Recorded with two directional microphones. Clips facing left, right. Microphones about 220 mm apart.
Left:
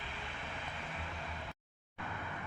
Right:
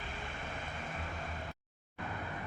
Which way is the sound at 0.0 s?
45° right (ahead or behind).